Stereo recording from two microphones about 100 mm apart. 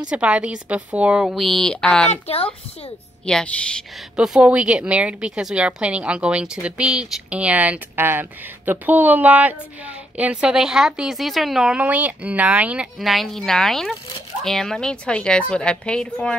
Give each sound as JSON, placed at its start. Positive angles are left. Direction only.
{"t": 0.1, "sound": "a woman's voice", "side_deg": -10}
{"t": 1.4, "sound": "a woman's voice", "side_deg": 5}
{"t": 2.2, "sound": "a child's voice", "side_deg": 75}
{"t": 3.3, "sound": "a woman's voice", "side_deg": 10}
{"t": 4.2, "sound": "a woman's voice", "side_deg": -10}
{"t": 13.0, "sound": "a woman's voice", "side_deg": 0}